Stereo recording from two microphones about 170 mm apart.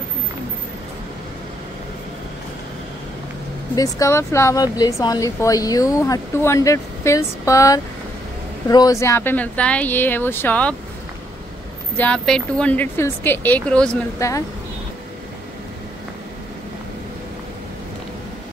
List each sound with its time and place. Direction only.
3.7 s speech: 20° left (ahead or behind)
12.0 s speech: 5° left (ahead or behind)